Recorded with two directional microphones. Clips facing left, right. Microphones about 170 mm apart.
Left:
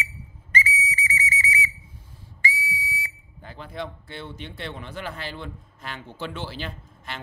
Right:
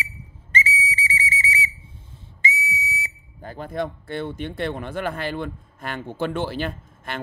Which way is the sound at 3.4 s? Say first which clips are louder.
Right 6 dB; 45° right (ahead or behind).